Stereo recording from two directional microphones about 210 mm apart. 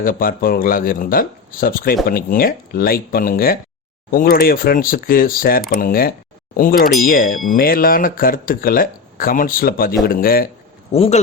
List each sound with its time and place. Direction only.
0.0 s speech: 40° left (ahead or behind)
10.9 s speech: 25° left (ahead or behind)